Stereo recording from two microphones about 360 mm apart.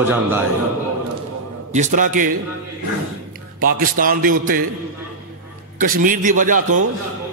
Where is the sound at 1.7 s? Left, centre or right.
Centre.